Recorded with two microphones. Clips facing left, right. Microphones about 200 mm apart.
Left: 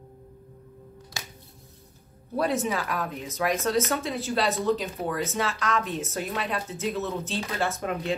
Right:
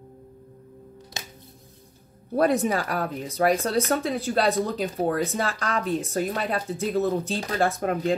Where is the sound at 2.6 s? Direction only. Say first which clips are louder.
Right 3 dB; 40° right (ahead or behind).